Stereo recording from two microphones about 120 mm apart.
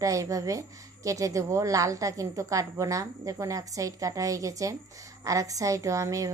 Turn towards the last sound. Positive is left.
turn(degrees=-30)  # may be behind; listen again after turning